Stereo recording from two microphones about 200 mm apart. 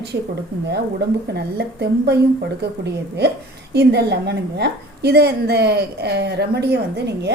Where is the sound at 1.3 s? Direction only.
55° right (ahead or behind).